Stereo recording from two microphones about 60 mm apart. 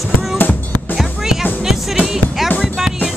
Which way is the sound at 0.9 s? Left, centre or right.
Centre.